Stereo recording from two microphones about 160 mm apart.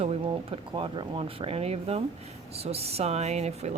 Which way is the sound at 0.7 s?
30° right (ahead or behind).